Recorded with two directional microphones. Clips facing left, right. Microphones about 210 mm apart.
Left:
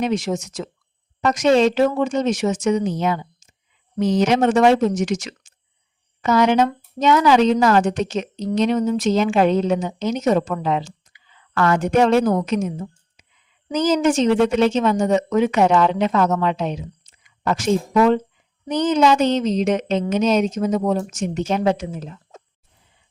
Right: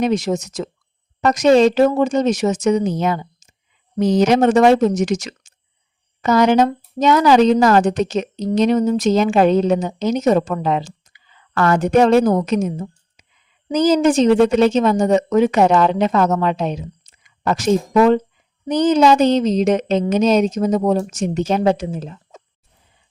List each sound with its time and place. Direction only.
0.0 s a woman's voice: 40° right (ahead or behind)
13.2 s a sound: 40° right (ahead or behind)
13.7 s a woman's voice: 35° right (ahead or behind)